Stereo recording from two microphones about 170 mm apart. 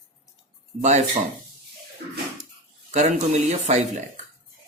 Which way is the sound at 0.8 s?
45° right (ahead or behind).